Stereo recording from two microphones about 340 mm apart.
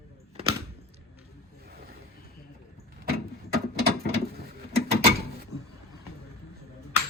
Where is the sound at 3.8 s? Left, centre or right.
Right.